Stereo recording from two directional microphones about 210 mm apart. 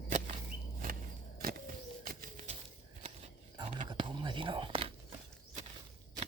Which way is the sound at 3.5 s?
25° right (ahead or behind).